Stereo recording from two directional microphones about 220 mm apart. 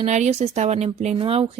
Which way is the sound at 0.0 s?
30° right (ahead or behind).